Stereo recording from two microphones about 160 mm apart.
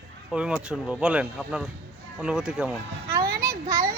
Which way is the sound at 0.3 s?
5° right (ahead or behind).